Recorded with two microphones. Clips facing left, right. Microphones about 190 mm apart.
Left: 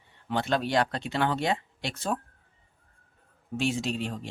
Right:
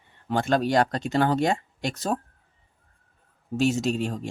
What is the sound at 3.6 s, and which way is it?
Speech, 45° right (ahead or behind).